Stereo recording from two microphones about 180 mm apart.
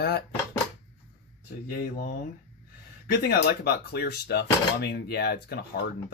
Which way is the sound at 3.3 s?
60° left (ahead or behind).